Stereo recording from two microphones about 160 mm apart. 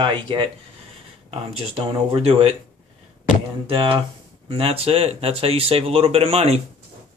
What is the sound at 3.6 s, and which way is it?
Speech, 35° right (ahead or behind).